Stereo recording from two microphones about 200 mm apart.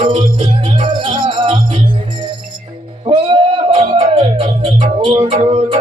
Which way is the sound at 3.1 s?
25° right (ahead or behind).